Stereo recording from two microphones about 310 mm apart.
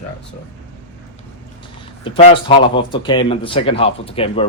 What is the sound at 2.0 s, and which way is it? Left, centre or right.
Speech, centre.